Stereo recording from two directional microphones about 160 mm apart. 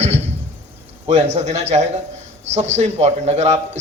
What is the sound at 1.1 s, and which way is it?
A man's voice, 45° right (ahead or behind).